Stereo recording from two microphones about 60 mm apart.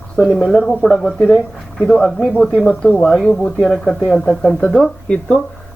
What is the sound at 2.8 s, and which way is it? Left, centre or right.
Speech, centre.